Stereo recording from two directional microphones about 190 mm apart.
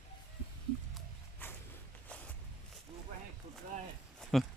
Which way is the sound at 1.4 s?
10° left (ahead or behind).